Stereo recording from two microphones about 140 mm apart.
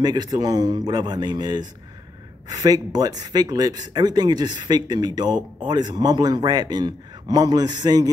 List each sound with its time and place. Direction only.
0.0 s speech: 30° right (ahead or behind)